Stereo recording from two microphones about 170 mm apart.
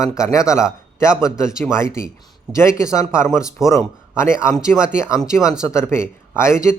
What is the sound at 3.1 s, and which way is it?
Speech, 15° left (ahead or behind).